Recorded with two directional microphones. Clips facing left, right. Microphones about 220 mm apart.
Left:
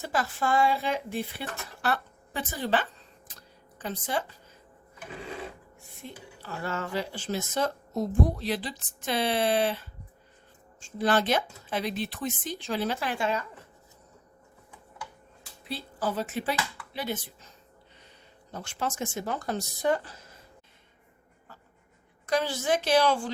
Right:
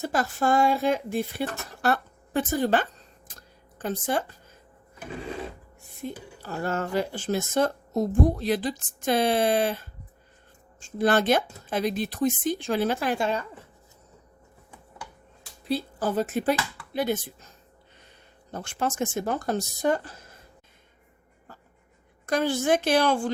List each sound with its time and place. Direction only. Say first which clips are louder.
0.0 s speech: right 4 dB; 45° right (ahead or behind)
3.2 s a sound: right 1 dB; 45° right (ahead or behind)
6.0 s speech: right 8 dB; 40° right (ahead or behind)
15.7 s speech: right 6 dB; 45° right (ahead or behind)
18.5 s speech: right 4 dB; 55° right (ahead or behind)
22.3 s speech: right 4 dB; 55° right (ahead or behind)